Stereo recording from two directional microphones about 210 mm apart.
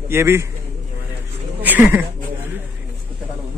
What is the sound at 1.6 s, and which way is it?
Speech, 10° right (ahead or behind).